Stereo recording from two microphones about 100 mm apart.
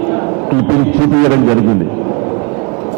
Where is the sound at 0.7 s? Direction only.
25° right (ahead or behind).